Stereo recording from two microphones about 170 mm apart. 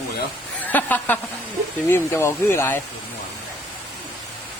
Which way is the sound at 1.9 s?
15° left (ahead or behind).